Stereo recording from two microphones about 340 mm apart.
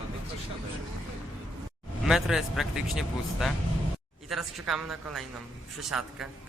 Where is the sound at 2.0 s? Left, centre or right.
Centre.